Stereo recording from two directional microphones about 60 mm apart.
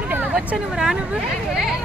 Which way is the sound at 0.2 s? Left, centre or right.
Right.